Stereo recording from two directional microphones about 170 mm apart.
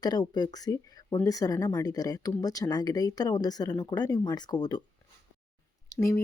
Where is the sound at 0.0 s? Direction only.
25° left (ahead or behind).